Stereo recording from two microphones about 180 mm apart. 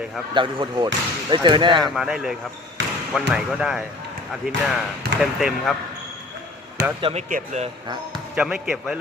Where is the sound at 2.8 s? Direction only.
90° right.